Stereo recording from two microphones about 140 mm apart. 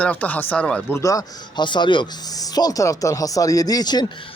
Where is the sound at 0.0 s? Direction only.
10° left (ahead or behind).